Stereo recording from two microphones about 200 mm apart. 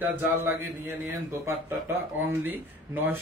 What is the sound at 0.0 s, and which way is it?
Speech, 10° right (ahead or behind).